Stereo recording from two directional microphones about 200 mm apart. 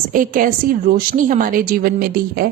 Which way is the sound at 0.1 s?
45° right (ahead or behind).